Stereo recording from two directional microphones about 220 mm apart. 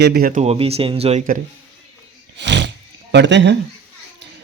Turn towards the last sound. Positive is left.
turn(degrees=-55)  # may be behind; listen again after turning